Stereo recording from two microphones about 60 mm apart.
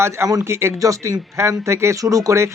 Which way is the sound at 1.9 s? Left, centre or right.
Right.